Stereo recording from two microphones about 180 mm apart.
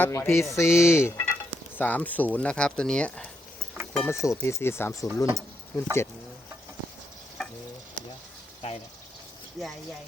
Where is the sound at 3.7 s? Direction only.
5° left (ahead or behind).